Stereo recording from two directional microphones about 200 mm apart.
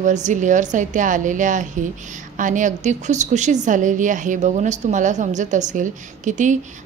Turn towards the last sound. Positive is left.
turn(degrees=-40)  # may be behind; listen again after turning